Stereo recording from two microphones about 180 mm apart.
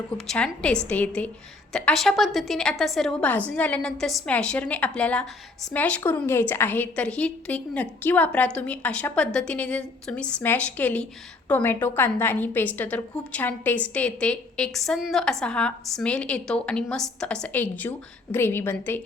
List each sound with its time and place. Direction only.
0.3 s a woman's voice: 5° left (ahead or behind)